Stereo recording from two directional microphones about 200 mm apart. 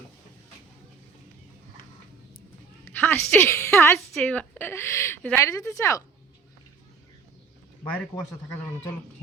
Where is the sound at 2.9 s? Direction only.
10° left (ahead or behind).